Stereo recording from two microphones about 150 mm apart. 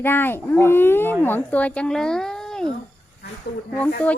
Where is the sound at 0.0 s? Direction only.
15° left (ahead or behind).